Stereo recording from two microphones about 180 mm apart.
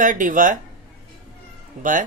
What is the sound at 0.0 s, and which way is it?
Speech, 45° right (ahead or behind).